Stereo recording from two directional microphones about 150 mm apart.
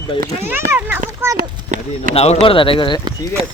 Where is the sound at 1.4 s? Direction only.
60° right (ahead or behind).